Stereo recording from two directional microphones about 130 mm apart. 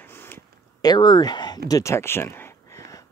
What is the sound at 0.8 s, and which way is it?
Speech, 30° left (ahead or behind).